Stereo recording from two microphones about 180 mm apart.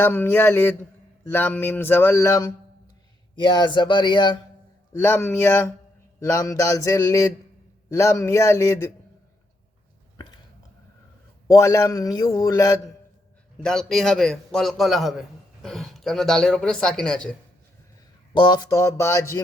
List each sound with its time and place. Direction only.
0.0 s speech: 10° left (ahead or behind)
3.4 s a man's voice: 25° left (ahead or behind)
4.9 s speech: 15° left (ahead or behind)
11.4 s a man's voice: 15° left (ahead or behind)
13.6 s speech: centre (ahead or behind)
18.3 s speech: 25° left (ahead or behind)